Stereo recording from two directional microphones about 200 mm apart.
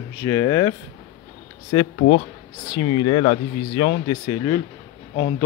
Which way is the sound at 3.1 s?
25° left (ahead or behind).